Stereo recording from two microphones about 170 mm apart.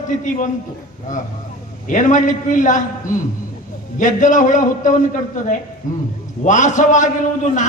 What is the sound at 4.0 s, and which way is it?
A man's voice, 50° left (ahead or behind).